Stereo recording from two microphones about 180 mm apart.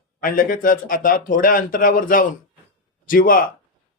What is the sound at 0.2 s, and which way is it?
Speech, 50° left (ahead or behind).